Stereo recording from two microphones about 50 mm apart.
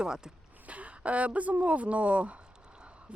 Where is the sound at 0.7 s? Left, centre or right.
Right.